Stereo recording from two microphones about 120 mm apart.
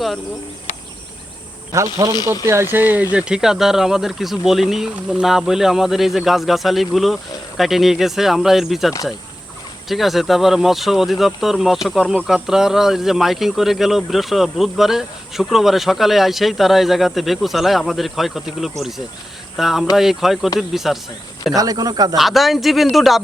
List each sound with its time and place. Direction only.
1.7 s speech: 30° right (ahead or behind); by 8.9 s centre (ahead or behind)
9.9 s speech: centre (ahead or behind)
21.5 s speech: 30° right (ahead or behind)
22.1 s speech: centre (ahead or behind)